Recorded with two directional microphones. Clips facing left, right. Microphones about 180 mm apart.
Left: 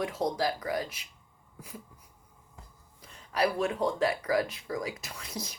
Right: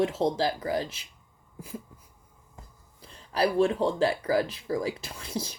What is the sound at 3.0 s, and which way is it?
Speech, 30° right (ahead or behind).